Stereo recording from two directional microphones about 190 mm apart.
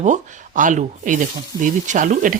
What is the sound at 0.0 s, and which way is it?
Speech, 40° right (ahead or behind).